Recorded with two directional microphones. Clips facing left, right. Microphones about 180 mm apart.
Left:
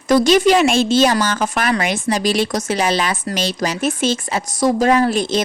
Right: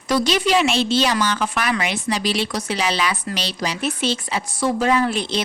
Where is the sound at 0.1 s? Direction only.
45° left (ahead or behind).